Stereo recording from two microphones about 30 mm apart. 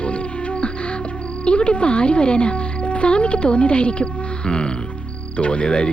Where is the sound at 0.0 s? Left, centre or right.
Left.